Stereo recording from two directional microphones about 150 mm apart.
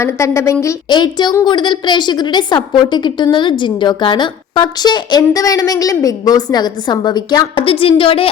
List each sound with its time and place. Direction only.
0.0 s a woman's voice: 20° left (ahead or behind)
0.9 s a woman's voice: 30° left (ahead or behind)